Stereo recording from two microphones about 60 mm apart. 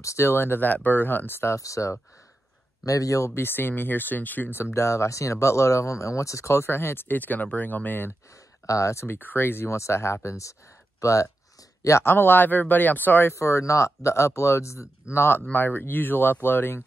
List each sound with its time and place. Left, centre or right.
0.2 s speech: left
1.5 s speech: left
2.8 s speech: left
3.3 s speech: left
8.6 s speech: left
9.0 s speech: left
9.7 s speech: left
12.0 s speech: left
13.3 s speech: left
15.1 s speech: left